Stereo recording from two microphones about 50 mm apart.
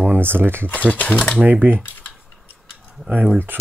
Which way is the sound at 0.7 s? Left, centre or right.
Left.